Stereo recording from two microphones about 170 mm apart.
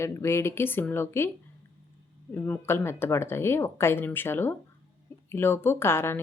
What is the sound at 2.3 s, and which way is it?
A woman's voice, 15° left (ahead or behind).